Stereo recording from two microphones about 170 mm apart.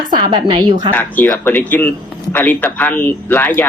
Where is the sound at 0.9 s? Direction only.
10° left (ahead or behind).